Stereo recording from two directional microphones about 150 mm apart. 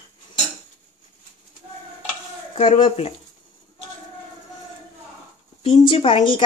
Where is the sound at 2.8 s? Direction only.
40° left (ahead or behind).